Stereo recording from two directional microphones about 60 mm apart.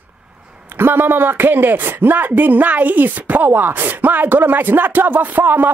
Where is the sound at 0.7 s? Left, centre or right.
Right.